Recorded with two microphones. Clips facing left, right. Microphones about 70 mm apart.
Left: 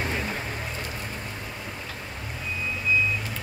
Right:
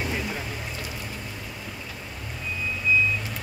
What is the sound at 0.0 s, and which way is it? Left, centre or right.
Boat, left.